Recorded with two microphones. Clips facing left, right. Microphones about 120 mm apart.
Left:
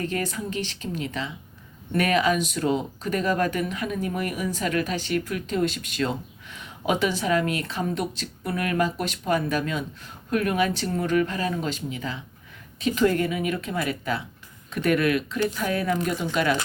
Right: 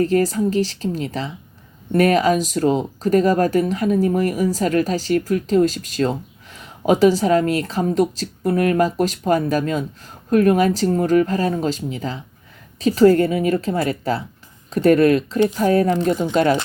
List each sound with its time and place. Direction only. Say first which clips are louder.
0.0 s speech: right 11 dB; 35° right (ahead or behind)